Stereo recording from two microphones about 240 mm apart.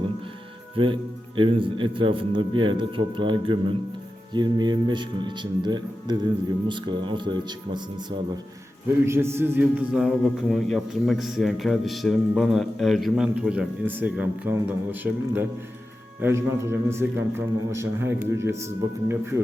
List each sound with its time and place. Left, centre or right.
1.4 s a man's voice: right
9.0 s a man's voice: centre